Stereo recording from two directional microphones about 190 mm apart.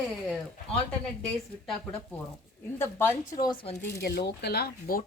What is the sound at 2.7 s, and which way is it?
A woman's voice, 10° left (ahead or behind).